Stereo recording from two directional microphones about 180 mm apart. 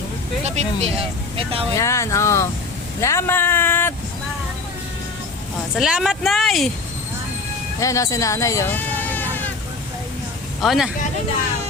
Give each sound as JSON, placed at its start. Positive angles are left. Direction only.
{"t": 0.4, "sound": "speech", "side_deg": -35}
{"t": 1.7, "sound": "speech", "side_deg": 15}
{"t": 5.7, "sound": "speech", "side_deg": 0}
{"t": 7.8, "sound": "speech", "side_deg": 20}
{"t": 10.6, "sound": "speech", "side_deg": 0}